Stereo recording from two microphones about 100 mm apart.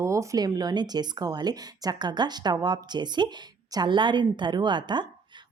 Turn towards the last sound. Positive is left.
turn(degrees=-50)  # may be behind; listen again after turning